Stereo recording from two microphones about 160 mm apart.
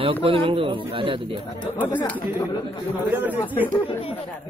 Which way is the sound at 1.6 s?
10° left (ahead or behind).